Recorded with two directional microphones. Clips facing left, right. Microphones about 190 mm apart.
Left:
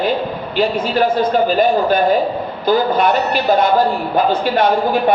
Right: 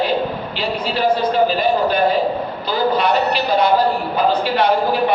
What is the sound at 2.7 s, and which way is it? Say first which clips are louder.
Speech: left 3 dB; 50° left (ahead or behind).